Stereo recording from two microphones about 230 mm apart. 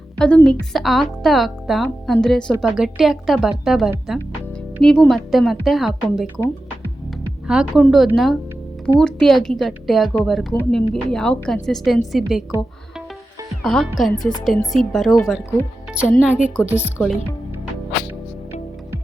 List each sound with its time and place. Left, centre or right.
0.2 s a woman's voice: centre
6.3 s music: centre
7.4 s a woman's voice: centre